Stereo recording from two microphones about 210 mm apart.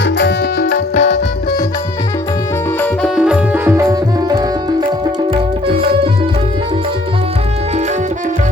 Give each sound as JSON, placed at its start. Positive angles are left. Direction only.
{"t": 0.0, "sound": "music", "side_deg": 55}
{"t": 3.2, "sound": "music", "side_deg": -5}